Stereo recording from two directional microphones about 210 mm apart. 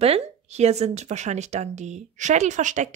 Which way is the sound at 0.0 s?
30° right (ahead or behind).